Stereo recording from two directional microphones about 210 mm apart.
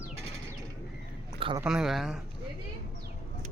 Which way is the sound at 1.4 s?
25° right (ahead or behind).